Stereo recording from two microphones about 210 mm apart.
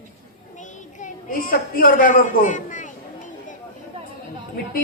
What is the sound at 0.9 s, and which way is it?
A child's voice, 40° left (ahead or behind).